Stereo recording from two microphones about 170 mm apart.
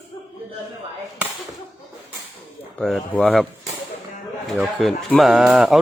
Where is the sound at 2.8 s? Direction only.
5° left (ahead or behind).